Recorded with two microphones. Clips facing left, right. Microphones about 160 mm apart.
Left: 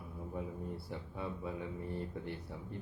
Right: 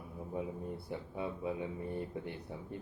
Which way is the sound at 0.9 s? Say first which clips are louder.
Right 3 dB; 15° right (ahead or behind).